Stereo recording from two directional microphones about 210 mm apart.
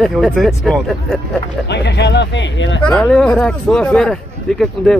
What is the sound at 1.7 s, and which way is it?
Speech, 55° left (ahead or behind).